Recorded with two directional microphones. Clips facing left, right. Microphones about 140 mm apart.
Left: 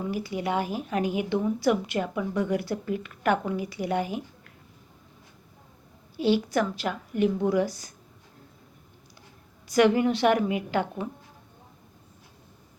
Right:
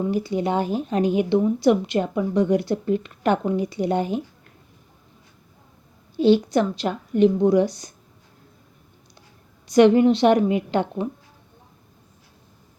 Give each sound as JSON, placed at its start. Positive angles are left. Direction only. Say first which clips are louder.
{"t": 0.1, "sound": "a woman's voice", "louder": "right 6 dB", "side_deg": -25}
{"t": 6.1, "sound": "a woman's voice", "louder": "right 6 dB", "side_deg": -25}
{"t": 9.7, "sound": "a woman's voice", "louder": "right 7 dB", "side_deg": -25}